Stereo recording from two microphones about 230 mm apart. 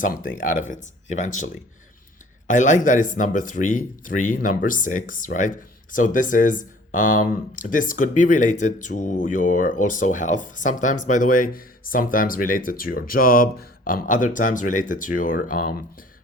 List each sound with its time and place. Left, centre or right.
0.0 s speech: left
2.5 s speech: left